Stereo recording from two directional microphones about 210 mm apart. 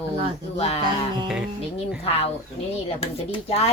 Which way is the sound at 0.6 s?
30° left (ahead or behind).